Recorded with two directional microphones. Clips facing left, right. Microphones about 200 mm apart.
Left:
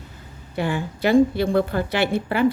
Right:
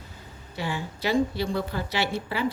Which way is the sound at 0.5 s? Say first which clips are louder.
Left 7 dB; 55° left (ahead or behind).